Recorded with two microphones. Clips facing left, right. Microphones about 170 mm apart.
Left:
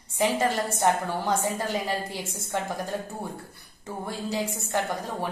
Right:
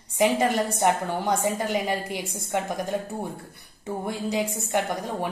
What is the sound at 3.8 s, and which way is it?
A woman's voice, 15° right (ahead or behind).